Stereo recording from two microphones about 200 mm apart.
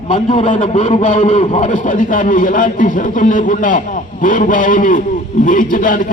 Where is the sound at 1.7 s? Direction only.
40° left (ahead or behind).